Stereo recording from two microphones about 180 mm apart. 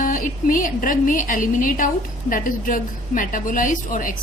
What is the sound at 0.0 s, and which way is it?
A woman's voice, 50° left (ahead or behind).